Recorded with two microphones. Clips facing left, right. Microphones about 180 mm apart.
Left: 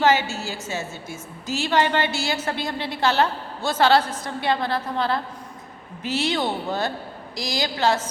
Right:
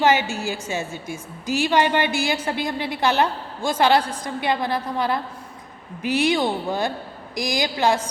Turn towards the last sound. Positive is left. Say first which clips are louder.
# right 2 dB
turn(degrees=-15)  # may be behind; listen again after turning